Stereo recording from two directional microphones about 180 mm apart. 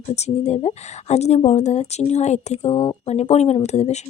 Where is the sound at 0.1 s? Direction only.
35° left (ahead or behind).